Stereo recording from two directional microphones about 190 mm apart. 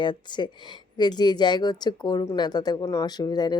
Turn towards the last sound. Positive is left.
turn(degrees=20)  # may be behind; listen again after turning